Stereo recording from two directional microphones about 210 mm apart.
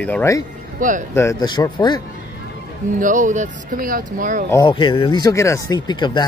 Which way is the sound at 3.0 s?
35° right (ahead or behind).